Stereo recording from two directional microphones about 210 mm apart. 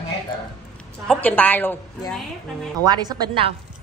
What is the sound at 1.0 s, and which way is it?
A woman's voice, 10° left (ahead or behind).